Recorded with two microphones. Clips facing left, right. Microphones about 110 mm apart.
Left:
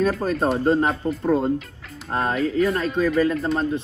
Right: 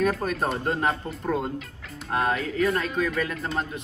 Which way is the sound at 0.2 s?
30° left (ahead or behind).